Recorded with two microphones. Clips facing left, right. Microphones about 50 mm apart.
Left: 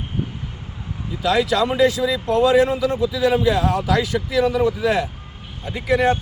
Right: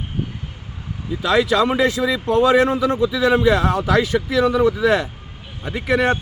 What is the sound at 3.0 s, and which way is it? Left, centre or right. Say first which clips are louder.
Speech: right 2 dB; right.